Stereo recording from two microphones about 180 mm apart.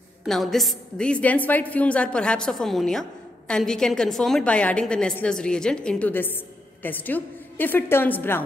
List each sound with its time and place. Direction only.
0.2 s a woman's voice: centre (ahead or behind)